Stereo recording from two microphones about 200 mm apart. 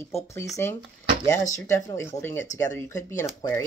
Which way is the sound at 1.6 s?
15° left (ahead or behind).